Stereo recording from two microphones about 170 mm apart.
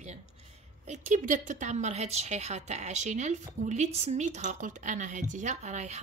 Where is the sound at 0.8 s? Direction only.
45° right (ahead or behind).